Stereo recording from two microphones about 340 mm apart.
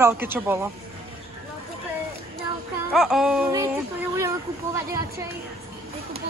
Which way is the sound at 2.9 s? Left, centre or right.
Centre.